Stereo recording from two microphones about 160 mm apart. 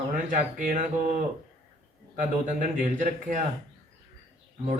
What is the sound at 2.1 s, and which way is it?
A man's voice, 50° right (ahead or behind).